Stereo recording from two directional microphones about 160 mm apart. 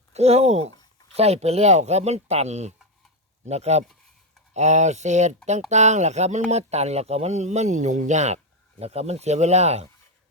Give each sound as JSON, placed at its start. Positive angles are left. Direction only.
{"t": 0.1, "sound": "speech", "side_deg": -40}